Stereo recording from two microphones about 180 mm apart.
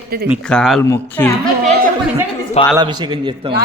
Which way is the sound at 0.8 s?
15° left (ahead or behind).